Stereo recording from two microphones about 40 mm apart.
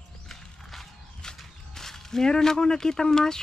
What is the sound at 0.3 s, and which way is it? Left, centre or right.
Horse, centre.